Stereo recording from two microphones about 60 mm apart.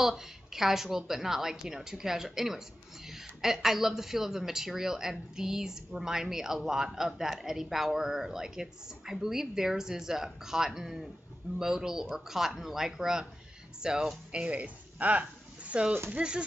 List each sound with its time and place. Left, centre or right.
0.0 s a woman's voice: centre